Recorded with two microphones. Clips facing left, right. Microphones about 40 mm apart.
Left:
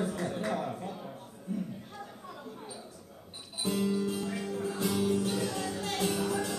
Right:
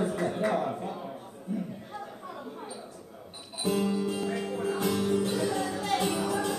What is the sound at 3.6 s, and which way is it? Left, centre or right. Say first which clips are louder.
Music: right 3 dB; centre.